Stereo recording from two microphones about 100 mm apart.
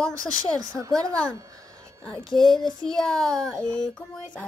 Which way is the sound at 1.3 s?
35° right (ahead or behind).